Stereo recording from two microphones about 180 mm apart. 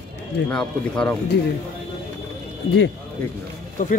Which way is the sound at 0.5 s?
5° left (ahead or behind).